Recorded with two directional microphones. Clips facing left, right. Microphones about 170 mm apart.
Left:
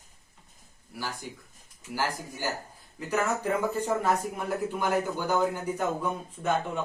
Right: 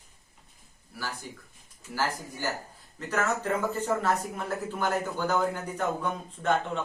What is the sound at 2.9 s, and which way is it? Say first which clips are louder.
Speech: left 1 dB; 10° left (ahead or behind).